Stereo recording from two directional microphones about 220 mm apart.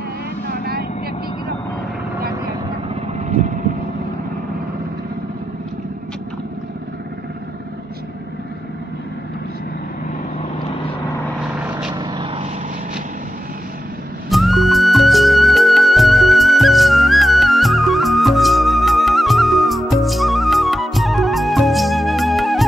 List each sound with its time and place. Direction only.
12.0 s vehicle: 20° right (ahead or behind)
14.3 s music: centre (ahead or behind)